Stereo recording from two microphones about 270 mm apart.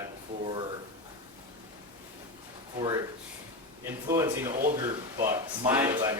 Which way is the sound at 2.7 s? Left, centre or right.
Centre.